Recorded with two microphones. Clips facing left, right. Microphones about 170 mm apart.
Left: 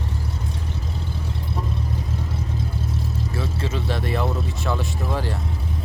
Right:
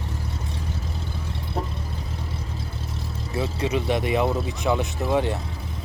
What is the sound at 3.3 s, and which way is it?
Speech, 20° right (ahead or behind).